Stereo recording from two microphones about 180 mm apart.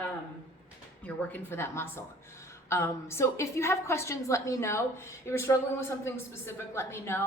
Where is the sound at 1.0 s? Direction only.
10° left (ahead or behind).